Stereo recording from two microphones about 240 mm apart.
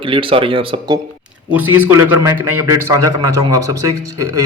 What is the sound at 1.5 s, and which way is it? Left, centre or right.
A man's voice, centre.